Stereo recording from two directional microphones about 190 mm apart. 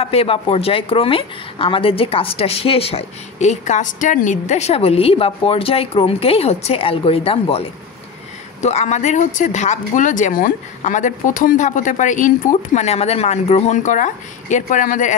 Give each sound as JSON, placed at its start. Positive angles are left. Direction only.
{"t": 0.0, "sound": "a woman's voice", "side_deg": 30}